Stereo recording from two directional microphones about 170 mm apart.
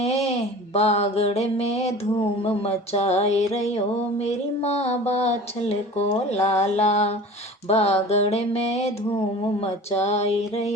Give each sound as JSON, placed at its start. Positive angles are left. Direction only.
{"t": 0.0, "sound": "mantra", "side_deg": 40}
{"t": 2.4, "sound": "music", "side_deg": 35}